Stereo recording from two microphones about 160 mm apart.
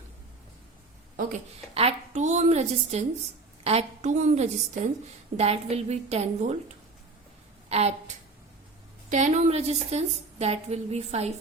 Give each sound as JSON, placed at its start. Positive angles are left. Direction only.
{"t": 1.1, "sound": "speech", "side_deg": -60}
{"t": 1.7, "sound": "a woman's voice", "side_deg": -40}